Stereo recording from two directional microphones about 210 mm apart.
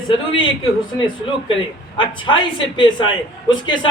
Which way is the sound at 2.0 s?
25° left (ahead or behind).